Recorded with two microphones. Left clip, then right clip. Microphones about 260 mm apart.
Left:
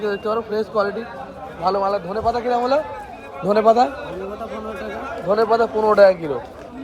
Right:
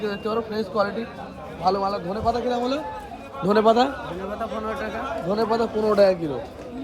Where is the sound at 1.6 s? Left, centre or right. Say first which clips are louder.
Left 3 dB; left.